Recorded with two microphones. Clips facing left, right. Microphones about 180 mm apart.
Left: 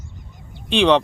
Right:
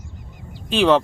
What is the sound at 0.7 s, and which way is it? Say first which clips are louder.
Speech: even; 5° right (ahead or behind).